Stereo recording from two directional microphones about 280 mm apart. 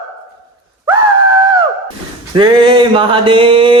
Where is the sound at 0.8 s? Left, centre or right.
Centre.